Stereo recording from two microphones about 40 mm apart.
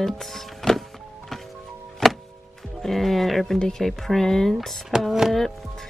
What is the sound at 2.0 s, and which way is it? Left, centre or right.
Music, centre.